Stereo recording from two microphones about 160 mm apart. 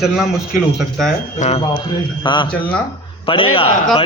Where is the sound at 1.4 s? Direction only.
40° left (ahead or behind).